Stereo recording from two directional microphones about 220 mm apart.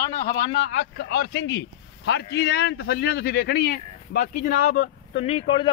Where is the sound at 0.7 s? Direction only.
45° left (ahead or behind).